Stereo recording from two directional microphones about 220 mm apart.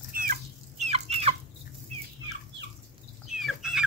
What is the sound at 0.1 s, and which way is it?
Chicken, 40° right (ahead or behind).